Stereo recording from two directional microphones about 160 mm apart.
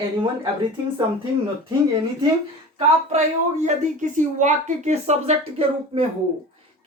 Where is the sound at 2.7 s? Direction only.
45° right (ahead or behind).